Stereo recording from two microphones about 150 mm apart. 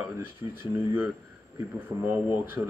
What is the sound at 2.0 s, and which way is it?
Speech, 15° right (ahead or behind).